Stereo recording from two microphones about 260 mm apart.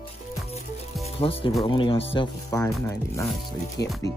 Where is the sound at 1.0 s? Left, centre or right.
Left.